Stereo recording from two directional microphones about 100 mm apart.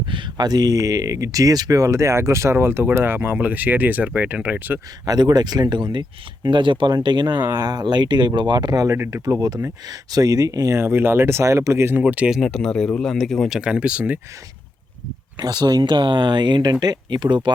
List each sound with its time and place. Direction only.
0.0 s speech: 55° right (ahead or behind); by 4.8 s 15° right (ahead or behind)
5.0 s speech: 45° right (ahead or behind)
9.0 s speech: 25° right (ahead or behind)
9.2 s speech: 40° right (ahead or behind); by 12.4 s 10° right (ahead or behind)
12.4 s speech: 5° left (ahead or behind)
13.6 s speech: 10° right (ahead or behind)
15.4 s speech: 45° right (ahead or behind)